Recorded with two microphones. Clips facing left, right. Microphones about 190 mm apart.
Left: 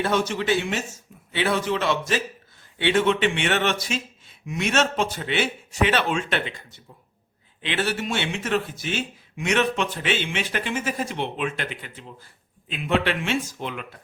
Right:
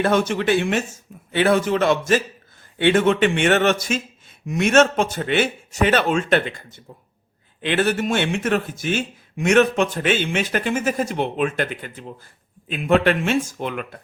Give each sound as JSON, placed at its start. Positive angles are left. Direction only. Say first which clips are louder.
{"t": 0.0, "sound": "speech", "louder": "right 5 dB", "side_deg": -55}